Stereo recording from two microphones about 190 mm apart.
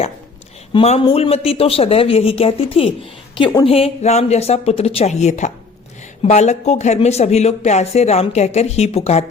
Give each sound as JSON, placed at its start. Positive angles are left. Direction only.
{"t": 0.7, "sound": "a woman's voice", "side_deg": 25}